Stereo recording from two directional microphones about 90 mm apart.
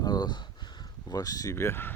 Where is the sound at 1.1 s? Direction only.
40° left (ahead or behind).